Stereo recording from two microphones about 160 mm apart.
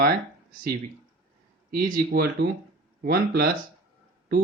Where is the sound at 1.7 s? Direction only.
65° right (ahead or behind).